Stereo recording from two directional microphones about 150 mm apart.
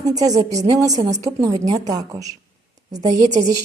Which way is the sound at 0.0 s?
25° right (ahead or behind).